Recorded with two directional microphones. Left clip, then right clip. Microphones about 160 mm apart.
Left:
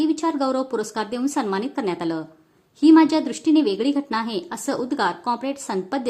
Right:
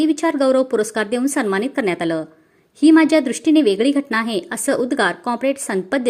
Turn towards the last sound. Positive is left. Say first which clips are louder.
# right 5 dB
turn(degrees=-20)  # may be behind; listen again after turning